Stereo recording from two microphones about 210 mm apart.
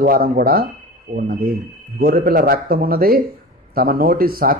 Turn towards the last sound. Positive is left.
turn(degrees=-45)  # may be behind; listen again after turning